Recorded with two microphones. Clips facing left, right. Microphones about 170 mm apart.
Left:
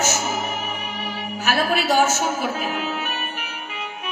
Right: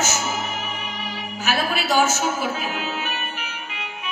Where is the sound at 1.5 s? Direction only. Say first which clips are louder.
Left 2 dB; 50° left (ahead or behind).